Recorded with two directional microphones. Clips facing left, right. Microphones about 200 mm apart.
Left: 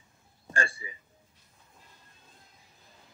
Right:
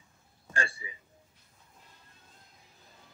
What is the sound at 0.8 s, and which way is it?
Speech, 45° left (ahead or behind).